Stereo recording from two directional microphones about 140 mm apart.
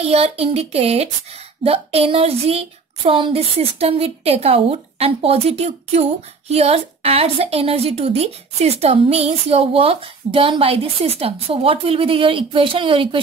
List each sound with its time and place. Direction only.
0.0 s a woman's voice: 45° right (ahead or behind)